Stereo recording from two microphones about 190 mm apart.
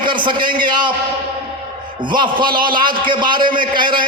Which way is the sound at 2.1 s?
25° right (ahead or behind).